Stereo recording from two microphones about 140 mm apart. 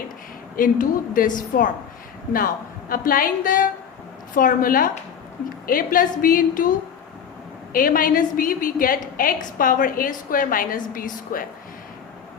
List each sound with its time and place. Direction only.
0.5 s a woman's voice: 80° left
2.9 s a woman's voice: 90° left
7.7 s a woman's voice: 85° left